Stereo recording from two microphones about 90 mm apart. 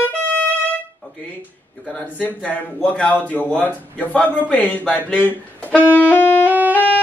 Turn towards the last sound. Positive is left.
turn(degrees=-20)  # may be behind; listen again after turning